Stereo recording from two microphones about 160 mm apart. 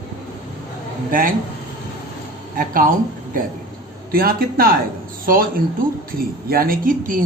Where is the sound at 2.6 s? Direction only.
60° right (ahead or behind).